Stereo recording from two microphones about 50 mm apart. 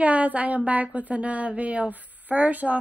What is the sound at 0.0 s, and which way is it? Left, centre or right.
Speech, right.